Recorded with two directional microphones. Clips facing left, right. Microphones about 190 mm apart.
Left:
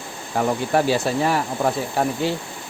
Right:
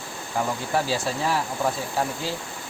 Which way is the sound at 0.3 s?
60° left (ahead or behind).